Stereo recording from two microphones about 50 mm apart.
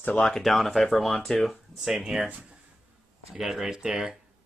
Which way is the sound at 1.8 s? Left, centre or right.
Centre.